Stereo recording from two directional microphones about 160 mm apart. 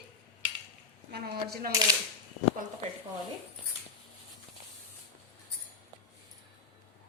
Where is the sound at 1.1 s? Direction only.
80° right.